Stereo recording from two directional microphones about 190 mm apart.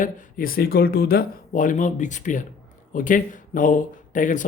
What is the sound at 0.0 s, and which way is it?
Speech, 45° left (ahead or behind).